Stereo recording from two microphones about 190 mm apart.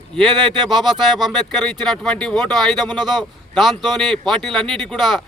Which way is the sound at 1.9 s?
Centre (ahead or behind).